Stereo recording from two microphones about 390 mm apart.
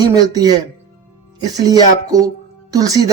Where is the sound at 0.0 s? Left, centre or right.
Centre.